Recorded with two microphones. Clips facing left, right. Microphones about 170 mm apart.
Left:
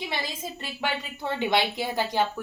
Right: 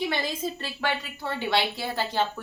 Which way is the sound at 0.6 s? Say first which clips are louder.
Right 1 dB; 20° left (ahead or behind).